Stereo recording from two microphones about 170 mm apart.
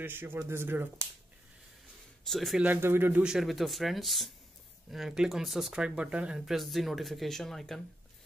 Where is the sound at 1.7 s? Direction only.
Centre (ahead or behind).